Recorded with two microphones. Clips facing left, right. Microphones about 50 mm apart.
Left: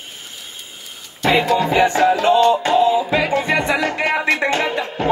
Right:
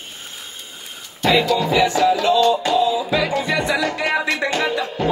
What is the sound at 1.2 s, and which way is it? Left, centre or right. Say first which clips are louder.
Music: left 1 dB; left.